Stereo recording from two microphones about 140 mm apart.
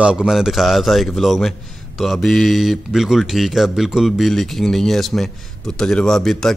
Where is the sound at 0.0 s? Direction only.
5° right (ahead or behind).